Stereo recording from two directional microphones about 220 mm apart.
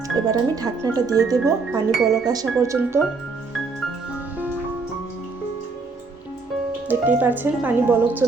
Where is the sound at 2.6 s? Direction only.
10° right (ahead or behind).